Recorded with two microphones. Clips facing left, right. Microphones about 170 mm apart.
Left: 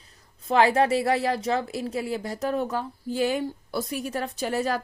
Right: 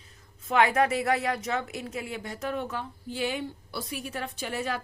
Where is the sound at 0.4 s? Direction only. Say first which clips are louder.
Left 3 dB; 30° left (ahead or behind).